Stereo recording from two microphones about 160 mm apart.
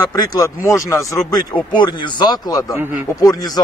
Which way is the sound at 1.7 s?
30° left (ahead or behind).